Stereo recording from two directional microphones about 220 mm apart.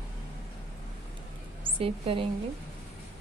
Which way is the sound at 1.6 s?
25° right (ahead or behind).